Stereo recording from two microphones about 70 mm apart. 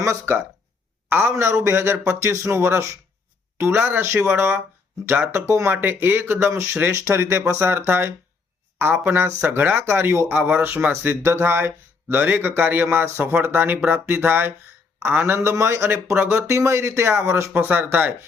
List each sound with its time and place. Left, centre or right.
0.0 s speech: right
15.4 s speech: right